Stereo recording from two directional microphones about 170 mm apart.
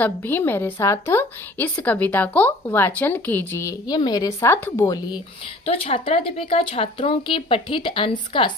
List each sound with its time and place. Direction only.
0.0 s a woman's voice: 10° left (ahead or behind)
5.7 s speech: 35° left (ahead or behind)